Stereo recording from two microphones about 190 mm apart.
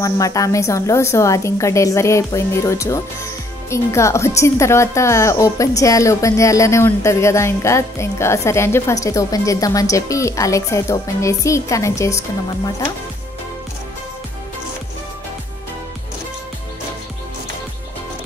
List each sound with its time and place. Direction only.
0.0 s speech: 15° left (ahead or behind)